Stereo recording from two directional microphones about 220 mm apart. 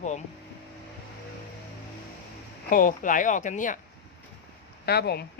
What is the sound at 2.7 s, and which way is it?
Speech, 40° left (ahead or behind).